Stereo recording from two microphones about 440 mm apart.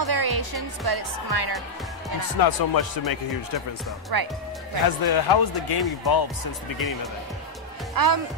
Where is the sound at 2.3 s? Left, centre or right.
Left.